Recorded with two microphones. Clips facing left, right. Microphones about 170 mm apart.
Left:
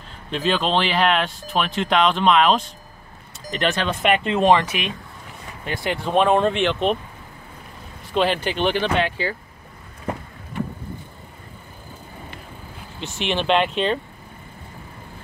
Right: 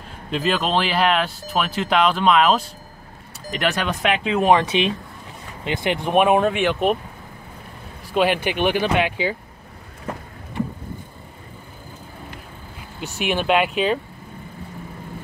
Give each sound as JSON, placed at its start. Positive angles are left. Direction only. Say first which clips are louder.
{"t": 0.3, "sound": "speech", "louder": "even", "side_deg": -5}
{"t": 4.6, "sound": "speech", "louder": "right 7 dB", "side_deg": -30}
{"t": 8.1, "sound": "speech", "louder": "right 1 dB", "side_deg": -10}
{"t": 13.0, "sound": "speech", "louder": "right 1 dB", "side_deg": -10}